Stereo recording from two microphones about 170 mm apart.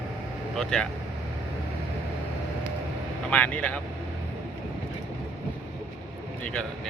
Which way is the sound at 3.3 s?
10° left (ahead or behind).